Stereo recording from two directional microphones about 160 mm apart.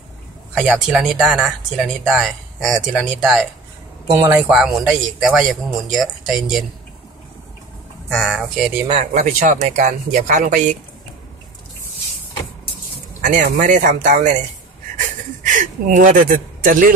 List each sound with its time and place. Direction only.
0.6 s speech: 5° right (ahead or behind)
4.1 s speech: 15° right (ahead or behind)
4.5 s speech: 5° right (ahead or behind)
8.1 s speech: 5° left (ahead or behind)
8.8 s speech: 50° right (ahead or behind)
13.2 s speech: 55° right (ahead or behind)
15.0 s a sound: 55° right (ahead or behind)